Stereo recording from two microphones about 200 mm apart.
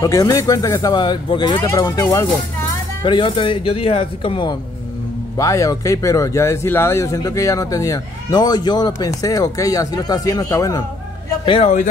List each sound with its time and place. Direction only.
0.0 s speech: 15° left (ahead or behind)